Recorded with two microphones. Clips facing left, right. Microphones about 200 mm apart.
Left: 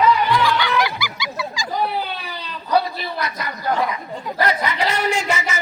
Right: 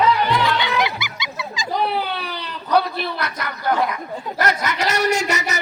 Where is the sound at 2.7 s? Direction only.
65° right (ahead or behind).